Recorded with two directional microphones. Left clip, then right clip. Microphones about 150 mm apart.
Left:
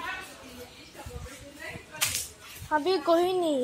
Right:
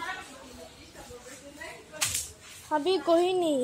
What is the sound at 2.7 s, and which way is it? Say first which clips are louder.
Speech: even; 15° right (ahead or behind).